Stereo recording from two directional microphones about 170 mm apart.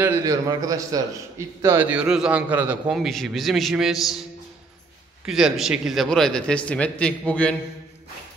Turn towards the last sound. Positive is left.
turn(degrees=5)  # may be behind; listen again after turning